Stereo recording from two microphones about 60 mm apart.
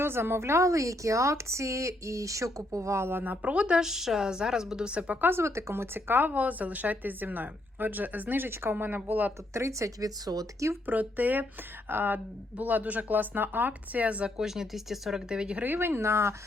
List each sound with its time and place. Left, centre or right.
0.0 s a woman's voice: right
3.4 s speech: right
3.8 s speech: centre
5.2 s speech: right
9.5 s a woman's voice: right
10.8 s speech: right
14.3 s speech: centre
15.6 s speech: right